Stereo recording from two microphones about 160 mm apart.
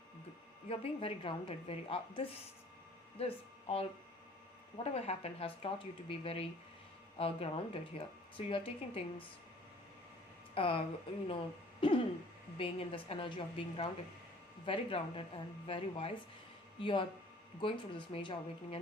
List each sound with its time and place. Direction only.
0.7 s speech: 35° left (ahead or behind)
10.5 s speech: 35° left (ahead or behind)